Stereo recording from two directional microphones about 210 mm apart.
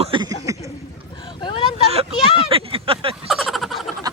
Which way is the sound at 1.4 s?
25° left (ahead or behind).